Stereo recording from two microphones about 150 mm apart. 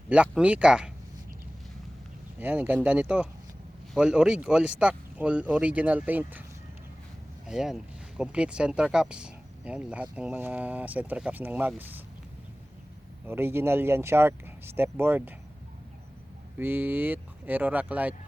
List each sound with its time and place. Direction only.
0.1 s speech: 10° right (ahead or behind)
2.4 s speech: 10° right (ahead or behind)
7.4 s speech: 5° right (ahead or behind)
13.2 s speech: 15° right (ahead or behind)
16.6 s speech: 15° right (ahead or behind)